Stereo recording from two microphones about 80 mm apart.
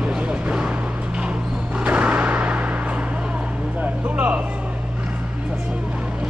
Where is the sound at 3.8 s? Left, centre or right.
Right.